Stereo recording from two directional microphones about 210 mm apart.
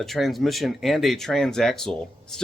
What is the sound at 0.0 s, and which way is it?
Speech, centre (ahead or behind).